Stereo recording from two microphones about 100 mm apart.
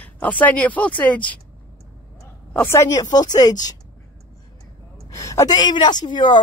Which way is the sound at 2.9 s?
40° left (ahead or behind).